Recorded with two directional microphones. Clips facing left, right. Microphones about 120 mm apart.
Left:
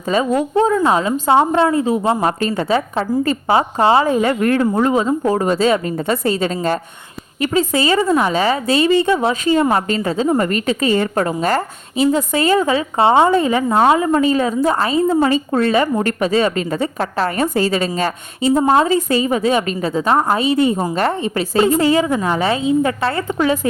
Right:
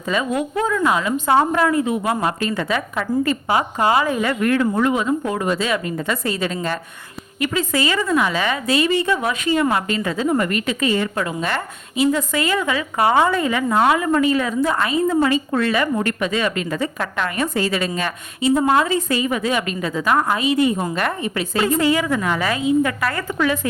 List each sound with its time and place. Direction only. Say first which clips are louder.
0.1 s a woman's voice: left 5 dB; 35° left (ahead or behind)